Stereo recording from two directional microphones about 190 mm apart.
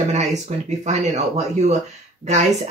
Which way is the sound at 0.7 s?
40° right (ahead or behind).